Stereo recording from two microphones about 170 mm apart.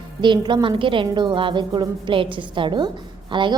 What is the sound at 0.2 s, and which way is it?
A woman's voice, 25° right (ahead or behind).